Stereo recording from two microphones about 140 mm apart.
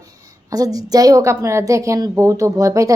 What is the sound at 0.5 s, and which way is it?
A woman's voice, 25° right (ahead or behind).